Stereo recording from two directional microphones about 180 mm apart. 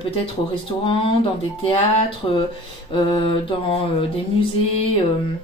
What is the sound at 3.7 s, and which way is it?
Speech, 35° left (ahead or behind).